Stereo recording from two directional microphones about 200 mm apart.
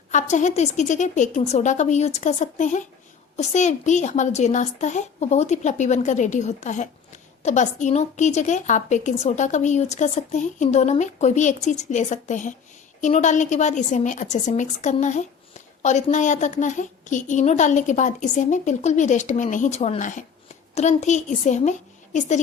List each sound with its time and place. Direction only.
0.1 s a woman's voice: 40° left (ahead or behind)